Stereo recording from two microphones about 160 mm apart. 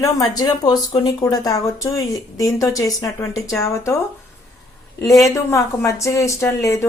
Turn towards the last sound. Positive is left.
turn(degrees=15)  # may be behind; listen again after turning